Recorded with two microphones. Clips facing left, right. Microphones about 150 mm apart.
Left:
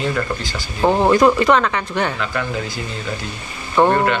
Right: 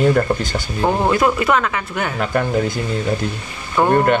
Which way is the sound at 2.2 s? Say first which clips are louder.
Right 5 dB; 45° right (ahead or behind).